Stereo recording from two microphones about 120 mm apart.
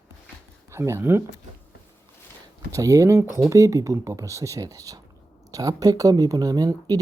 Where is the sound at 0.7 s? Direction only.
20° right (ahead or behind).